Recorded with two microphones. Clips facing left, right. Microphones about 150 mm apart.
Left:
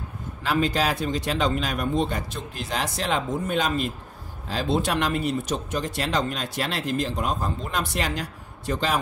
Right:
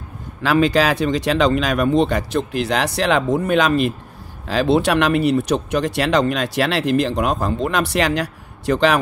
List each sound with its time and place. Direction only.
0.4 s speech: 90° right